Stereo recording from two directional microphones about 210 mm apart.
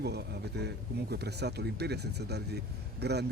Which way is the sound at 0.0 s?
50° right (ahead or behind).